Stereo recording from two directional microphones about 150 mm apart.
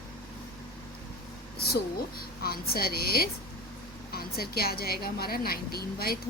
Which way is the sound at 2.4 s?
90° left.